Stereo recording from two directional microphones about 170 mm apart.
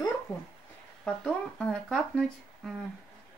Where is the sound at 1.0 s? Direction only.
5° left (ahead or behind).